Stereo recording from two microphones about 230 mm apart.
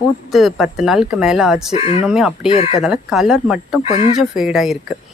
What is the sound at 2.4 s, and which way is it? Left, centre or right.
Speech, left.